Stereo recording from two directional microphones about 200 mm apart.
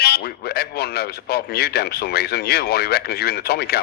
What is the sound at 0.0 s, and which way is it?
A man's voice, 55° left (ahead or behind).